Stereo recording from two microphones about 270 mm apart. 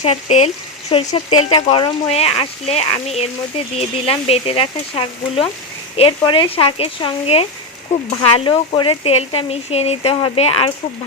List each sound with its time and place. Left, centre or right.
0.0 s speech: left